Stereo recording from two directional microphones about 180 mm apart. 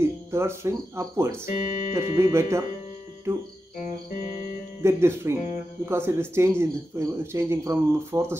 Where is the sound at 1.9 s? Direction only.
15° right (ahead or behind).